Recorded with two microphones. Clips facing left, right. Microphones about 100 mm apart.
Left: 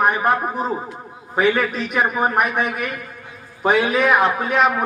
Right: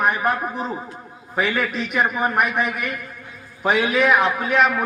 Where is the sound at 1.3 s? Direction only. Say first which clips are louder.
Left 4 dB; 40° left (ahead or behind).